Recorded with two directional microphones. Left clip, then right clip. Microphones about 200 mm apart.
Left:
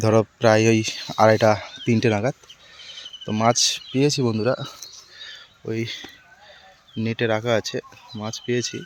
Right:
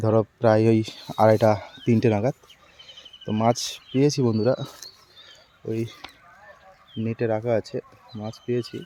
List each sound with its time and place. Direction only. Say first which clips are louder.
0.0 s speech: left 3 dB; 5° left (ahead or behind); by 4.7 s 20° right (ahead or behind)
4.7 s a sound: left 3 dB; 5° right (ahead or behind)
7.1 s speech: left 2 dB; centre (ahead or behind)